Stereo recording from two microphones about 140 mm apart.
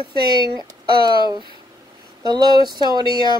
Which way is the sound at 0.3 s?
30° right (ahead or behind).